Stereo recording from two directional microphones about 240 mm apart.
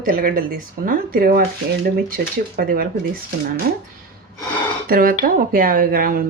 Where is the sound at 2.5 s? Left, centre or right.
Right.